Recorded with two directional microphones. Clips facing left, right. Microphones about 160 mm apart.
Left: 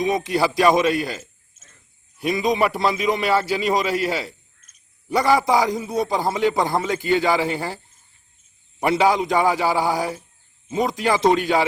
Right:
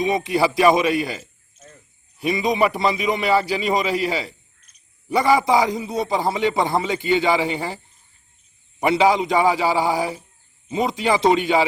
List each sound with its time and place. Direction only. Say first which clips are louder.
0.0 s a man's voice: right 1 dB; centre (ahead or behind)
4.6 s cricket: even; 45° left (ahead or behind)
5.0 s a man's voice: right 1 dB; centre (ahead or behind)
8.8 s a man's voice: right 1 dB; centre (ahead or behind)